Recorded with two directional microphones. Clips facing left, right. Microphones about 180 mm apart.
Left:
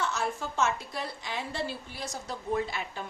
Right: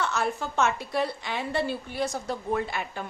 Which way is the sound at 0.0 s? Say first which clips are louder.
Right 3 dB; 65° right (ahead or behind).